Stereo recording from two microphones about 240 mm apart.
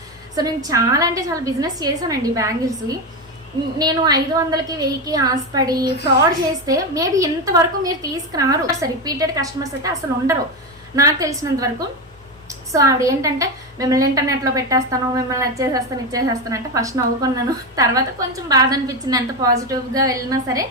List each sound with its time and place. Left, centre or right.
0.3 s a woman's voice: centre
3.8 s a woman's voice: centre